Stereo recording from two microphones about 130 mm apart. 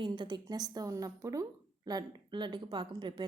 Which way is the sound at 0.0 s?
35° right (ahead or behind).